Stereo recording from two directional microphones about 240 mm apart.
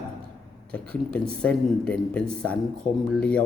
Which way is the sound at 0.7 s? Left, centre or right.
Centre.